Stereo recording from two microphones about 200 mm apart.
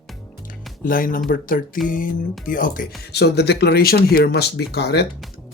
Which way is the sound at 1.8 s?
40° left (ahead or behind).